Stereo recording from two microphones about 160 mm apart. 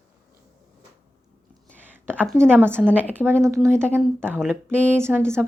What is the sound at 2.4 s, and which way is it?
Speech, 15° right (ahead or behind).